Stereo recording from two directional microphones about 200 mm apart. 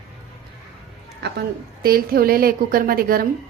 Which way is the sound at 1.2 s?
50° right (ahead or behind).